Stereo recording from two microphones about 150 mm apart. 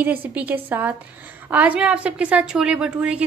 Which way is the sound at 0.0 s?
10° right (ahead or behind).